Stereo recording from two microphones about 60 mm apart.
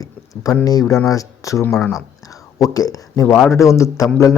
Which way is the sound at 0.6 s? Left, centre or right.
Left.